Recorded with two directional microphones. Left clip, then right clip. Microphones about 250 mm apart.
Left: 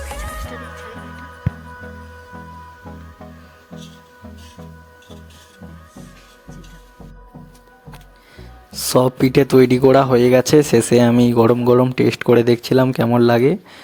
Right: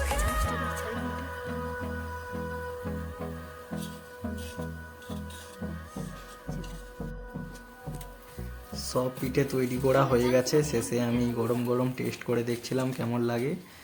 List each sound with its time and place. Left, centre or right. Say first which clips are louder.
0.0 s music: even; centre
8.8 s speech: left 15 dB; left